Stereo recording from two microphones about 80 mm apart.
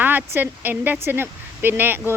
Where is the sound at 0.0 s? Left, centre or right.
Right.